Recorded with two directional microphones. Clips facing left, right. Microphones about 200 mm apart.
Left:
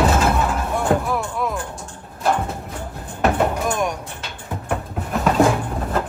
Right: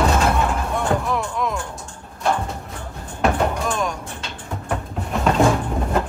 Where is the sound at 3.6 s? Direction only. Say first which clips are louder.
Left 2 dB; 15° left (ahead or behind).